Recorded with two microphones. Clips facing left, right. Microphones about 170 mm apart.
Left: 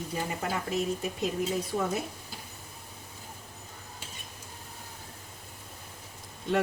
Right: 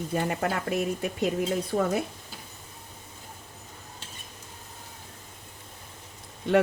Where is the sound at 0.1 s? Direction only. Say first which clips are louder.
Right 6 dB; 60° right (ahead or behind).